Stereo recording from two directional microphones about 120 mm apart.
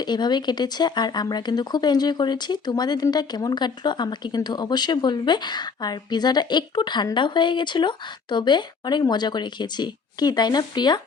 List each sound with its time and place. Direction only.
0.0 s speech: 35° left (ahead or behind)